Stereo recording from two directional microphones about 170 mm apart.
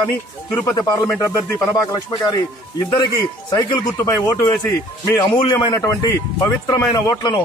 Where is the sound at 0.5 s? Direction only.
15° left (ahead or behind).